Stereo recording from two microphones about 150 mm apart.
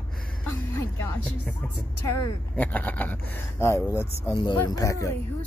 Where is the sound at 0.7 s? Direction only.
10° left (ahead or behind).